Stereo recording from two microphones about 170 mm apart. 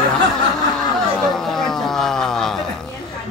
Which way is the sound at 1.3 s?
Centre (ahead or behind).